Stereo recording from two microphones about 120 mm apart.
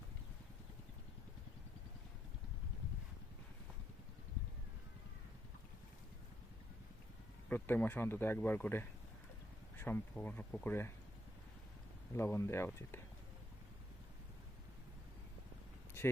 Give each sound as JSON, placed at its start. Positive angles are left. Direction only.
{"t": 7.5, "sound": "speech", "side_deg": 15}
{"t": 12.1, "sound": "speech", "side_deg": 20}